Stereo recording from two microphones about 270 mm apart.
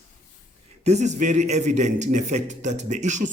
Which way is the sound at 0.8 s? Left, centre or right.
Right.